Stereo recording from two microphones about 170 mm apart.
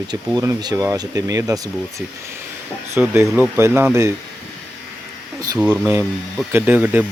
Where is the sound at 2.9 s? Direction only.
15° right (ahead or behind).